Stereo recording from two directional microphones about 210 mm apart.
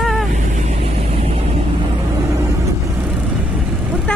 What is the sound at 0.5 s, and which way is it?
Vehicle, 30° right (ahead or behind).